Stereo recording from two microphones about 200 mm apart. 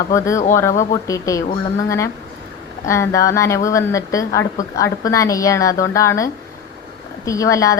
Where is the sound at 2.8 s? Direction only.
15° left (ahead or behind).